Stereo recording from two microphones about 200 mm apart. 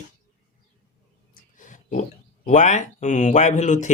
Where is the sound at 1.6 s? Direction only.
40° left (ahead or behind).